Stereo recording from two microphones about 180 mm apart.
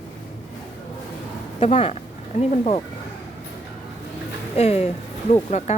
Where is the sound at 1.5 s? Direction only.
35° left (ahead or behind).